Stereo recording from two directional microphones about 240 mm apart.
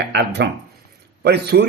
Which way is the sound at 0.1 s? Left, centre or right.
Right.